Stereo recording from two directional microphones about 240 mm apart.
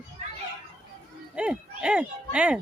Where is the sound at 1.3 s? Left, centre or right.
Centre.